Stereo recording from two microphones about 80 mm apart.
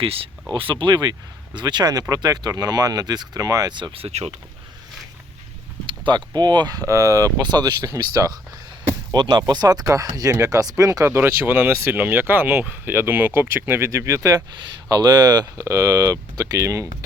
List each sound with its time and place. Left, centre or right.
0.5 s speech: right
1.5 s speech: right
3.7 s speech: right
5.8 s speech: right
7.3 s speech: right
7.9 s speech: right
9.1 s speech: right